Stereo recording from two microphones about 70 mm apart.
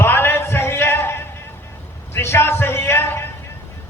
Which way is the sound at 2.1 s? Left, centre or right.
Left.